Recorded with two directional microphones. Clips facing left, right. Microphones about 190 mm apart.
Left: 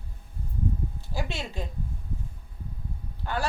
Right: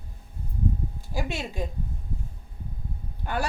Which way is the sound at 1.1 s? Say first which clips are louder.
Right 3 dB; 15° right (ahead or behind).